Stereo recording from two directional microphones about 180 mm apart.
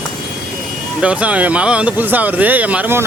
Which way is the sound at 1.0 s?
5° right (ahead or behind).